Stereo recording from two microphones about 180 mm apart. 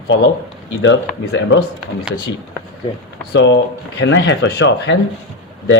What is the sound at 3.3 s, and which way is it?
Speech, 80° left.